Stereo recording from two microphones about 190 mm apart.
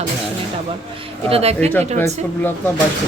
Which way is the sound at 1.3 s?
35° right (ahead or behind).